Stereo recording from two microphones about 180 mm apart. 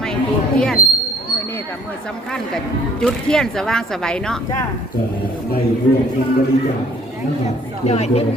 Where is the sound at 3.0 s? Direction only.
5° left (ahead or behind).